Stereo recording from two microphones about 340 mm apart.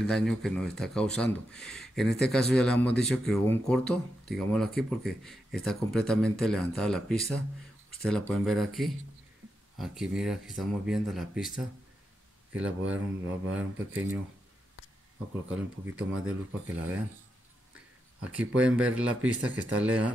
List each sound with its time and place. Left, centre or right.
0.0 s speech: centre
15.5 s speech: centre
16.1 s speech: right
18.2 s speech: centre